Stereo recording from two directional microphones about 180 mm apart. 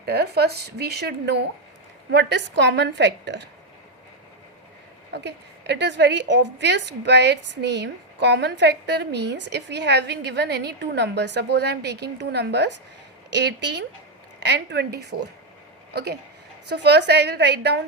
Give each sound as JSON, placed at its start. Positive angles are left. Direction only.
{"t": 0.0, "sound": "a woman's voice", "side_deg": -65}
{"t": 5.1, "sound": "a woman's voice", "side_deg": -70}